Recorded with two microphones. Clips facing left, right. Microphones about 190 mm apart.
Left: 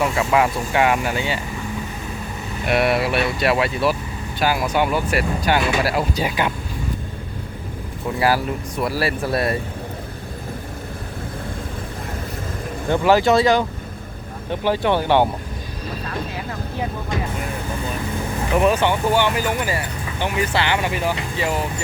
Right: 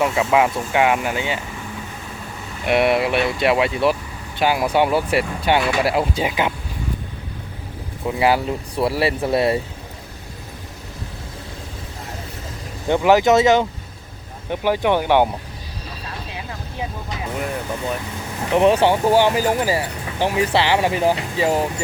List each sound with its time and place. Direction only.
0.0 s speech: 5° right (ahead or behind)
0.4 s speech: 15° right (ahead or behind)
2.6 s speech: 20° right (ahead or behind)
8.2 s speech: 20° right (ahead or behind)
12.9 s speech: 15° right (ahead or behind)
18.5 s speech: 30° right (ahead or behind)